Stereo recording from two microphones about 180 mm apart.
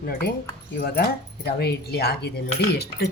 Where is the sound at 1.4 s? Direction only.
60° left (ahead or behind).